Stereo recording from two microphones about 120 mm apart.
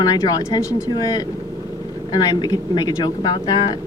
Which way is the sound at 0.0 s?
30° left (ahead or behind).